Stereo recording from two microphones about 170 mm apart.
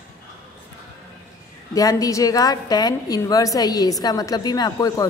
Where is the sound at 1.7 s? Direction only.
20° left (ahead or behind).